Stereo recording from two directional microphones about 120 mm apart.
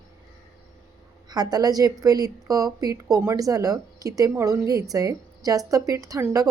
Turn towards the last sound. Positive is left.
turn(degrees=-25)  # may be behind; listen again after turning